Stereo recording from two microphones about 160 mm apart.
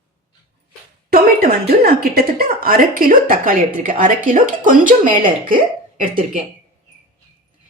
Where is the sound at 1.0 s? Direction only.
65° right (ahead or behind).